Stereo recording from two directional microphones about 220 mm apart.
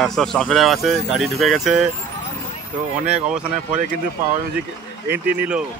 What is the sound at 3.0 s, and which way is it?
Speech, 5° right (ahead or behind).